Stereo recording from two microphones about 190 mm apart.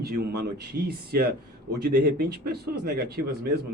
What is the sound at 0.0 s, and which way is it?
A man's voice, 55° right (ahead or behind).